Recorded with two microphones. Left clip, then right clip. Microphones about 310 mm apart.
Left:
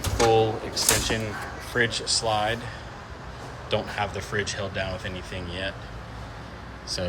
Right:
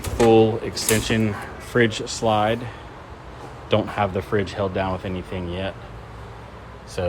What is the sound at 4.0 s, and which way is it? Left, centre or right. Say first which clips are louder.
Speech: right 6 dB; centre.